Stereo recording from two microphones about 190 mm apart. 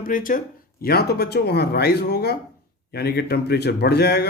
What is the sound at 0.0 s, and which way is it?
Speech, 45° left (ahead or behind).